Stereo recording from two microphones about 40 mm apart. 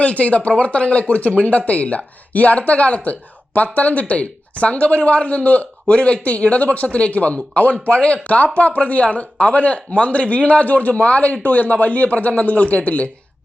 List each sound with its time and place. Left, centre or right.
0.0 s speech: left